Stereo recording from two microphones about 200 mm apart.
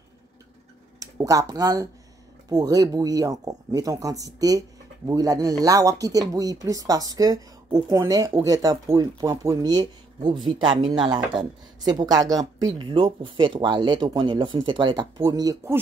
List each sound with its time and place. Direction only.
0.9 s speech: 15° right (ahead or behind)